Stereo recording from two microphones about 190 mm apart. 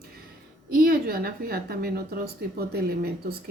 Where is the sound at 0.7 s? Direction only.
50° right (ahead or behind).